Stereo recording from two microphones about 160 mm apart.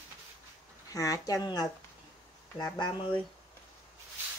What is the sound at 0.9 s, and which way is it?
Speech, 20° left (ahead or behind).